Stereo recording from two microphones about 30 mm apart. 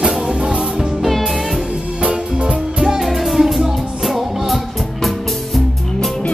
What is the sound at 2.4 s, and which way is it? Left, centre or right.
Music, right.